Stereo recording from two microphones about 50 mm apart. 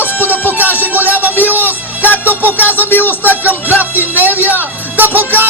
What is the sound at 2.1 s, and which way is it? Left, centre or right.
Speech, left.